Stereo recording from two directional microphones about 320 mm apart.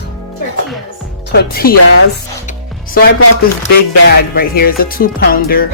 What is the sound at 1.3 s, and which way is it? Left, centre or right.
Speech, left.